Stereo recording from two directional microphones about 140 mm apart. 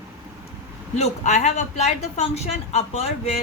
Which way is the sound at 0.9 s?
55° left (ahead or behind).